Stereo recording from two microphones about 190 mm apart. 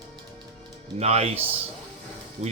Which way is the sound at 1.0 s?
35° right (ahead or behind).